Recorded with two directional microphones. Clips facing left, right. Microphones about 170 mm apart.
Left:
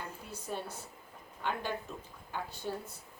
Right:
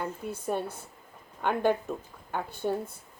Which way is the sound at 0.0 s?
55° right (ahead or behind).